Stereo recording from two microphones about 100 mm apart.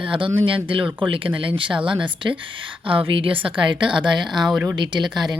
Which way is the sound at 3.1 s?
65° right (ahead or behind).